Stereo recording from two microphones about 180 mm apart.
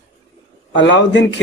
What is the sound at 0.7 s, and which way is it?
Speech, 90° left.